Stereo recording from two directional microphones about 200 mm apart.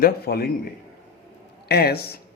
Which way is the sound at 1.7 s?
50° left (ahead or behind).